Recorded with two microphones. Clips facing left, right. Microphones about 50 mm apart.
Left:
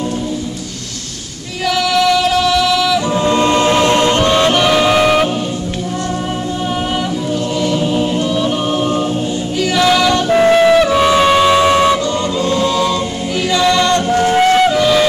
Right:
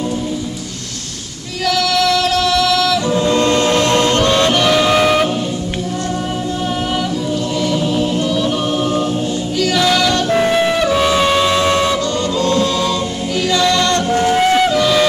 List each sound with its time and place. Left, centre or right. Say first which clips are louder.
1.7 s music: left 2 dB; centre
7.6 s choir: left 1 dB; centre
9.6 s music: left 2 dB; centre